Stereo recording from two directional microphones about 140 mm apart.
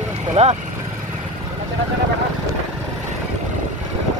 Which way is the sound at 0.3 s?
50° right (ahead or behind).